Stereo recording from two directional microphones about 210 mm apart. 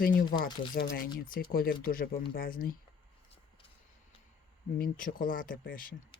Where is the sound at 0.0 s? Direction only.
40° left (ahead or behind).